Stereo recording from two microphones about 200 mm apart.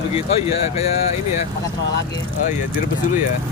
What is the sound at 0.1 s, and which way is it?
Speech, 30° left (ahead or behind).